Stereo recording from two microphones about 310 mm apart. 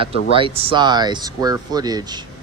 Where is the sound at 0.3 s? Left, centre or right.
Centre.